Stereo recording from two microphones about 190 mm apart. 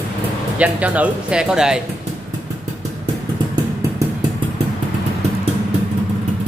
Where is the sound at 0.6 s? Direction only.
5° right (ahead or behind).